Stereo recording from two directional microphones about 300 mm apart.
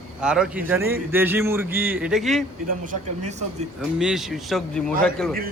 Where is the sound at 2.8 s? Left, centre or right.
Right.